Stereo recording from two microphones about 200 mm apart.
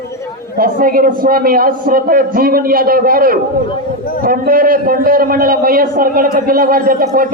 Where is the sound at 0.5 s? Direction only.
45° right (ahead or behind).